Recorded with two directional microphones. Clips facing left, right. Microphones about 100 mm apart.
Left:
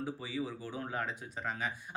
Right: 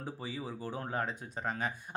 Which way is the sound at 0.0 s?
40° right (ahead or behind).